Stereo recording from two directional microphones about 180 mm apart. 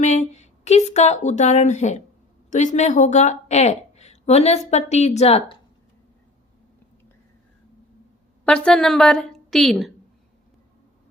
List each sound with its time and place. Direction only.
0.0 s a woman's voice: 40° left (ahead or behind)
8.4 s a woman's voice: 5° left (ahead or behind)